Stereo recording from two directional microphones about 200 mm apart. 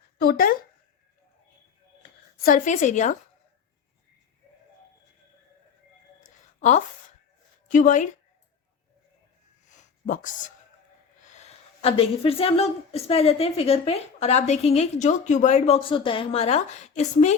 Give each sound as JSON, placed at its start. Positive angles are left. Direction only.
{"t": 0.2, "sound": "speech", "side_deg": 45}
{"t": 2.4, "sound": "a woman's voice", "side_deg": 40}
{"t": 6.1, "sound": "a sound", "side_deg": 35}
{"t": 7.7, "sound": "a woman's voice", "side_deg": 40}
{"t": 9.6, "sound": "a sound", "side_deg": 40}
{"t": 11.3, "sound": "a woman's voice", "side_deg": 35}